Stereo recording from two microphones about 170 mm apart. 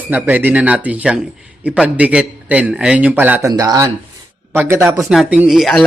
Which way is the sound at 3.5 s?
20° right (ahead or behind).